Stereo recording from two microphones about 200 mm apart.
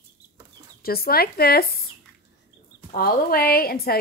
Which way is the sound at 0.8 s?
50° left (ahead or behind).